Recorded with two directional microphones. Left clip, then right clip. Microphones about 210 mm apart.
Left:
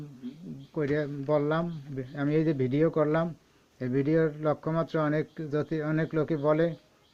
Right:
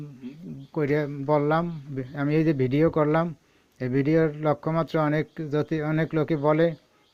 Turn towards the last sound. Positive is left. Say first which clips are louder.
# right 4 dB
turn(degrees=-30)  # may be behind; listen again after turning